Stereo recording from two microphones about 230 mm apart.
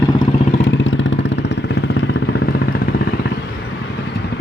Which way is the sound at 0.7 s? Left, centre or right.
Left.